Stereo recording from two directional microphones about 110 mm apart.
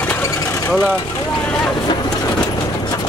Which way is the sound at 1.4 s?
5° left (ahead or behind).